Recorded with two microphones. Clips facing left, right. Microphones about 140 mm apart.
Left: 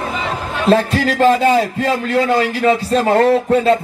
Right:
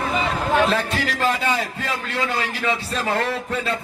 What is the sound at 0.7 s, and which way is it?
A man's voice, 40° left (ahead or behind).